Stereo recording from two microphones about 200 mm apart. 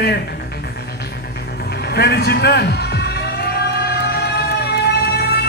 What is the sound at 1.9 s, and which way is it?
A man's voice, 55° left (ahead or behind).